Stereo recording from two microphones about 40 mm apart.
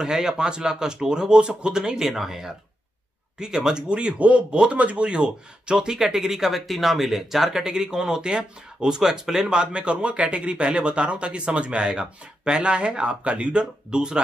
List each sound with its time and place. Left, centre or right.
0.0 s speech: centre
4.2 s speech: right
5.8 s speech: centre
6.5 s speech: centre
7.6 s speech: centre